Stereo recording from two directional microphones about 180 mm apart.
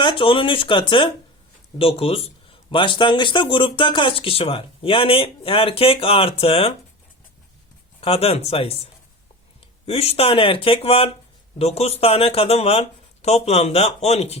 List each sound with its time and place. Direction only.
0.0 s speech: 30° left (ahead or behind)
8.0 s speech: 35° left (ahead or behind)
9.8 s speech: 35° left (ahead or behind)